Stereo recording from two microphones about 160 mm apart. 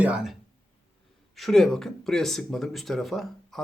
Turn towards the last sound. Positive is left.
turn(degrees=0)  # may be behind; listen again after turning